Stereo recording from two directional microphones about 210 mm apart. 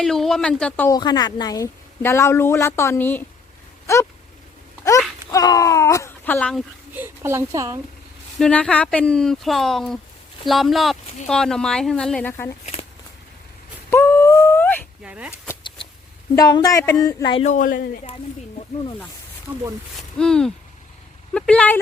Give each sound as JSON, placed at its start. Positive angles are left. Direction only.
{"t": 0.0, "sound": "speech", "side_deg": 0}
{"t": 0.9, "sound": "speech", "side_deg": 20}
{"t": 5.3, "sound": "a sound", "side_deg": 15}
{"t": 6.9, "sound": "speech", "side_deg": -10}
{"t": 8.4, "sound": "speech", "side_deg": 5}
{"t": 13.9, "sound": "a sound", "side_deg": 10}
{"t": 15.0, "sound": "speech", "side_deg": -5}
{"t": 16.3, "sound": "speech", "side_deg": 20}
{"t": 20.1, "sound": "speech", "side_deg": 5}